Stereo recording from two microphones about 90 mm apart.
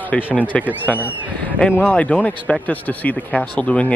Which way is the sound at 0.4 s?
15° left (ahead or behind).